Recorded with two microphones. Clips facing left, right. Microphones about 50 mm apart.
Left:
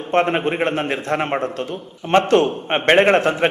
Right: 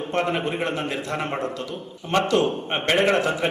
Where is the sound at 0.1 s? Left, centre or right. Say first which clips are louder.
Left 7 dB; left.